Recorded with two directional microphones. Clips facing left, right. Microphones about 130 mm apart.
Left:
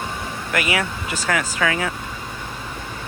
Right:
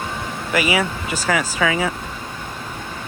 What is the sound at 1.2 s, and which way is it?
Speech, 10° right (ahead or behind).